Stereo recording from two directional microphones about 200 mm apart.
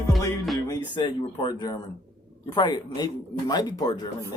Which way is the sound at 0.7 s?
25° left (ahead or behind).